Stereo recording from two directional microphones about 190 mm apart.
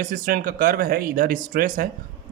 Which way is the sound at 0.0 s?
45° right (ahead or behind).